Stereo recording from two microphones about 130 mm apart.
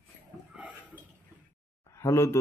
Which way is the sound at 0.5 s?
10° right (ahead or behind).